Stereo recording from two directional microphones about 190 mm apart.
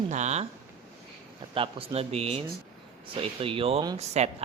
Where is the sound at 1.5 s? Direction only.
30° right (ahead or behind).